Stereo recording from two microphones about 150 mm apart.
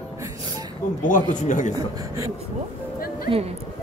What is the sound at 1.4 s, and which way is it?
Speech, 55° left (ahead or behind).